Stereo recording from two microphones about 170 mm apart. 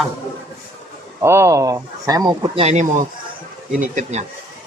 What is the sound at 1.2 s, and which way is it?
Speech, 15° right (ahead or behind).